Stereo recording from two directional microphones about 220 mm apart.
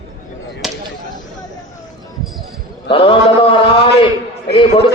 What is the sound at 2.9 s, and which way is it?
Mantra, 25° left (ahead or behind).